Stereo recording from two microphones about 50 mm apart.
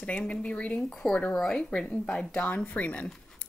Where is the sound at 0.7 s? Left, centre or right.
Centre.